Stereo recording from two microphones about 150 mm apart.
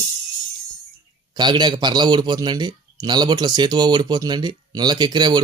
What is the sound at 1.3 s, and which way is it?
A man's voice, 30° right (ahead or behind).